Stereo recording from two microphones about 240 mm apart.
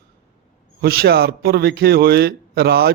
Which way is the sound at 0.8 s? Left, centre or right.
Right.